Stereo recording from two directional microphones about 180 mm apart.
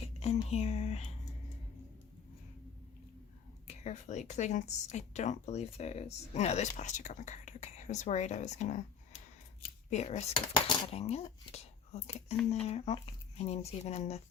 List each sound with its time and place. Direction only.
0.5 s speech: 35° left (ahead or behind)
3.7 s speech: 40° left (ahead or behind)